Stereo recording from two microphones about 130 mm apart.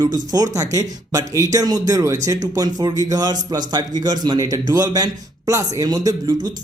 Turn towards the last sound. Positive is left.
turn(degrees=-30)  # may be behind; listen again after turning